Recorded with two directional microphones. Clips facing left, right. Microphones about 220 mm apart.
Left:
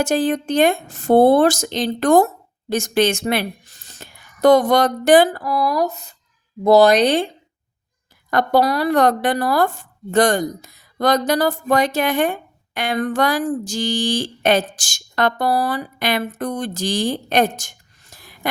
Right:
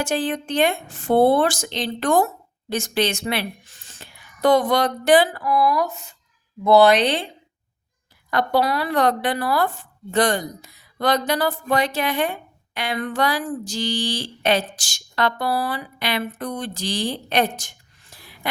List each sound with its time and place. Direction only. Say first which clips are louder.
0.0 s speech: left 5 dB; 45° left (ahead or behind)
8.3 s speech: left 4 dB; 45° left (ahead or behind)